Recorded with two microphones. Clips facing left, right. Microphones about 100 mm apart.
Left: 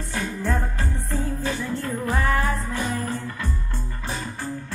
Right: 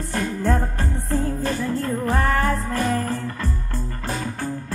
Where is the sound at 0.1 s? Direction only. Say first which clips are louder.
Right 4 dB; 45° right (ahead or behind).